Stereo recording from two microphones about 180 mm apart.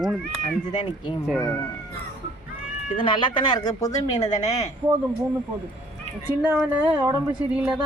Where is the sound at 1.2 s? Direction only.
Centre (ahead or behind).